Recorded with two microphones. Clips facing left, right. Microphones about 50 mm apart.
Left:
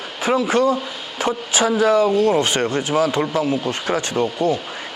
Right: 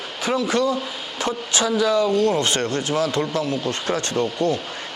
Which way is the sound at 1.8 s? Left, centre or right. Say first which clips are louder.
Left 4 dB; left.